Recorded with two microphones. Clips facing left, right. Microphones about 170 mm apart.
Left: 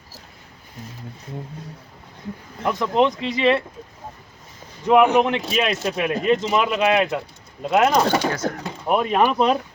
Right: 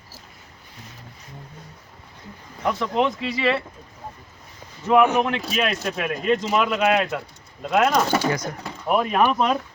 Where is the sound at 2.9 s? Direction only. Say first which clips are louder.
Left 5 dB; 25° left (ahead or behind).